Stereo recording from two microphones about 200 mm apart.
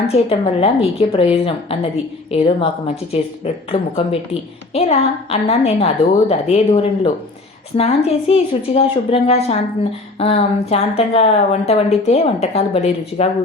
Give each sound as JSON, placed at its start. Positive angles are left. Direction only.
{"t": 0.1, "sound": "a woman's voice", "side_deg": 30}